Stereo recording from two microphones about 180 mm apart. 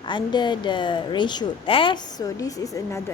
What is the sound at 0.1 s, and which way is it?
Speech, 25° left (ahead or behind).